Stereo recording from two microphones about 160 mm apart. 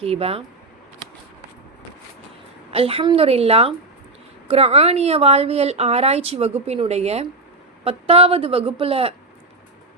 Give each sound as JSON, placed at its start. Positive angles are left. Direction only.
{"t": 0.0, "sound": "a woman's voice", "side_deg": -40}
{"t": 2.7, "sound": "a woman's voice", "side_deg": -35}